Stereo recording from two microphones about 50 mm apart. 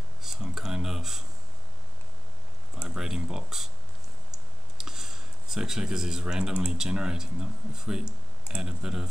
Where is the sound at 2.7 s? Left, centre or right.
Centre.